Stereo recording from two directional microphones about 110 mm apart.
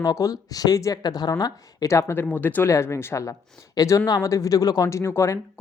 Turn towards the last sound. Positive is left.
turn(degrees=25)  # may be behind; listen again after turning